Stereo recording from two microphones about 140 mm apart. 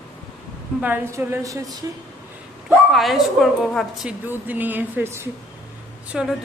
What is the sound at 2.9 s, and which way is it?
A woman's voice, centre (ahead or behind).